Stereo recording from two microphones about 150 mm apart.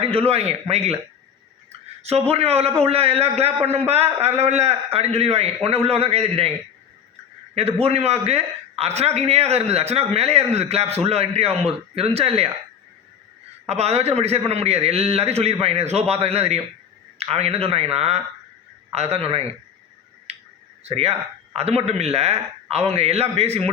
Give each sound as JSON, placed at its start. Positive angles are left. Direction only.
{"t": 0.0, "sound": "a man's voice", "side_deg": -40}
{"t": 2.0, "sound": "a man's voice", "side_deg": -45}
{"t": 7.8, "sound": "a man's voice", "side_deg": -45}
{"t": 13.7, "sound": "a man's voice", "side_deg": -45}
{"t": 20.3, "sound": "finger snapping", "side_deg": -45}
{"t": 20.8, "sound": "a man's voice", "side_deg": -45}